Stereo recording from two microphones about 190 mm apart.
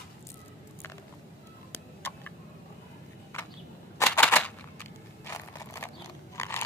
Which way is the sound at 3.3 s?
15° left (ahead or behind).